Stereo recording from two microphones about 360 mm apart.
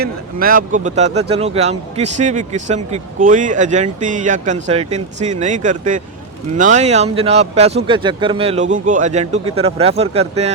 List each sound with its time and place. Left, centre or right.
0.0 s speech: right